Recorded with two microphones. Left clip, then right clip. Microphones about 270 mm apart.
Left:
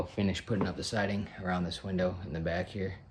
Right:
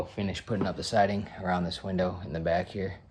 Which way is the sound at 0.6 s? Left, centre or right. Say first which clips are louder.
Right 7 dB; centre.